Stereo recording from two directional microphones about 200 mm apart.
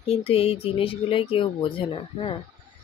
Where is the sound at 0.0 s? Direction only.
30° left (ahead or behind).